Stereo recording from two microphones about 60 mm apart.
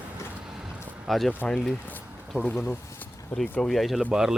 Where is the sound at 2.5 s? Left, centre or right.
Centre.